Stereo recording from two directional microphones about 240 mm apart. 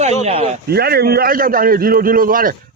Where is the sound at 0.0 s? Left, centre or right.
Right.